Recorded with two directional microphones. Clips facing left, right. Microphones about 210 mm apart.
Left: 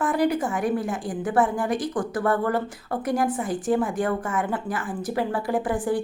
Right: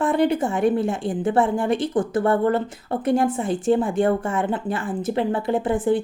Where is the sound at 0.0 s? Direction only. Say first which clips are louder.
Right 3 dB; 25° right (ahead or behind).